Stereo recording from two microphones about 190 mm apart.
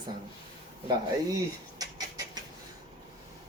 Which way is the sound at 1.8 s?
20° right (ahead or behind).